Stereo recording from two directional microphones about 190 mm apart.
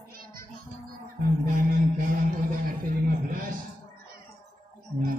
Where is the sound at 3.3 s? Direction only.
45° right (ahead or behind).